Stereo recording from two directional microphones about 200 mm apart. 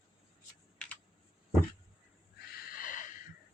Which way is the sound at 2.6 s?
45° left (ahead or behind).